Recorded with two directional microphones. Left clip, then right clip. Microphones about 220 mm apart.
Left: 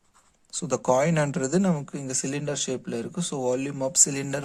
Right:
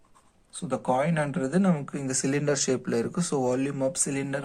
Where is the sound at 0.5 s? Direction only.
45° left (ahead or behind).